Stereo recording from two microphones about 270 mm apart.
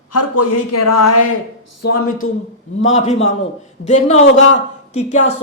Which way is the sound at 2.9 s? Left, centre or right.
Left.